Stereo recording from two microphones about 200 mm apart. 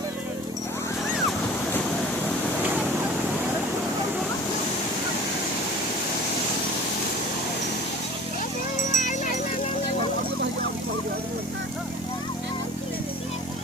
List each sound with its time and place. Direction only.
8.9 s music: 40° left (ahead or behind)